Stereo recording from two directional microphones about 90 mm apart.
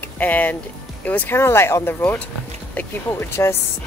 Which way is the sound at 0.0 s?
20° left (ahead or behind).